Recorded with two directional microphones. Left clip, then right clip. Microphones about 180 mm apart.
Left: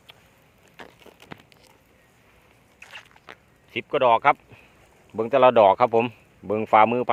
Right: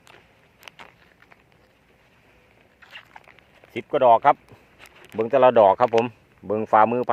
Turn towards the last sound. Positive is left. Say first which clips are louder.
# even
turn(degrees=0)  # may be behind; listen again after turning